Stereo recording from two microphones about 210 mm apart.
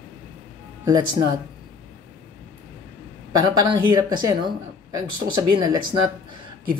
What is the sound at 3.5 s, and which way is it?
Speech, 20° right (ahead or behind).